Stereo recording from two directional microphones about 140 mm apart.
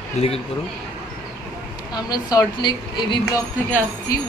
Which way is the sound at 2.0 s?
30° left (ahead or behind).